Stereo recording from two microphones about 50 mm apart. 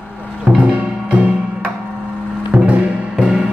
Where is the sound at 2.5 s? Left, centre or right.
Centre.